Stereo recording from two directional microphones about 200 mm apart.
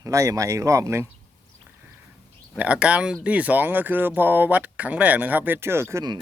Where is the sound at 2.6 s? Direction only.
5° right (ahead or behind).